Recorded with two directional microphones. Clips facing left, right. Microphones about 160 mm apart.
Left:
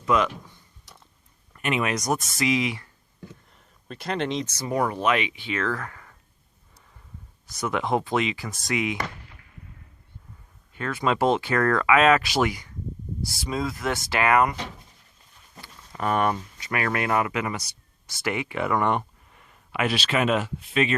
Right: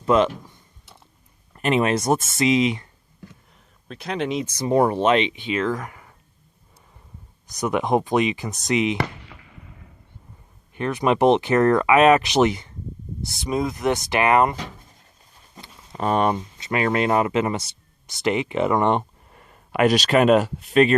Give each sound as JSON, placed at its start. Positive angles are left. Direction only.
{"t": 0.0, "sound": "speech", "side_deg": -30}
{"t": 1.5, "sound": "speech", "side_deg": -35}
{"t": 3.5, "sound": "speech", "side_deg": 0}
{"t": 4.7, "sound": "speech", "side_deg": -30}
{"t": 7.4, "sound": "speech", "side_deg": -15}
{"t": 9.0, "sound": "a sound", "side_deg": -90}
{"t": 10.8, "sound": "speech", "side_deg": -20}
{"t": 15.6, "sound": "speech", "side_deg": -25}
{"t": 19.3, "sound": "speech", "side_deg": -45}